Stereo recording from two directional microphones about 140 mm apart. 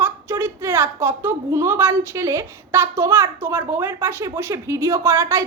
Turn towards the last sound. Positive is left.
turn(degrees=-20)  # may be behind; listen again after turning